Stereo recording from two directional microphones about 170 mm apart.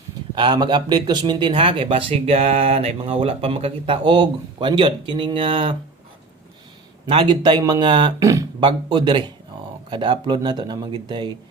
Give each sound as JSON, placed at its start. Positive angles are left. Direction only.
{"t": 0.3, "sound": "speech", "side_deg": -25}
{"t": 7.1, "sound": "speech", "side_deg": -30}